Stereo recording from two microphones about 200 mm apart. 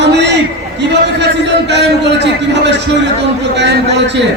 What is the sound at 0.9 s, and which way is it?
A man's voice, 60° right (ahead or behind).